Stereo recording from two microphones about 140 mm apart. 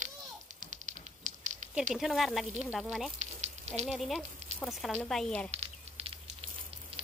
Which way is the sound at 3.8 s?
Centre (ahead or behind).